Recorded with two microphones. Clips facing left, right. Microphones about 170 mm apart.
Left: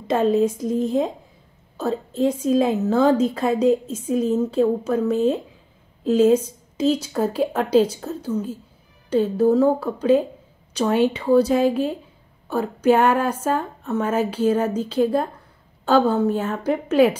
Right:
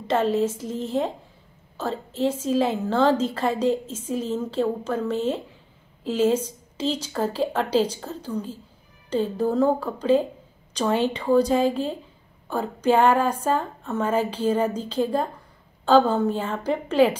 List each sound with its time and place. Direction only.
0.1 s a woman's voice: 10° left (ahead or behind)